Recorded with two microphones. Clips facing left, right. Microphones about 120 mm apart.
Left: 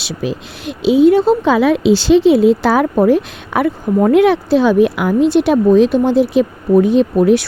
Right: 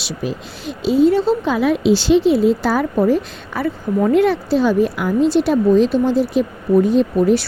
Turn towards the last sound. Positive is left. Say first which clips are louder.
# left 3 dB
turn(degrees=70)  # may be behind; listen again after turning